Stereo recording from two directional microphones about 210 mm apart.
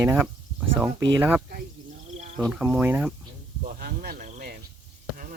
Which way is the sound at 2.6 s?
10° right (ahead or behind).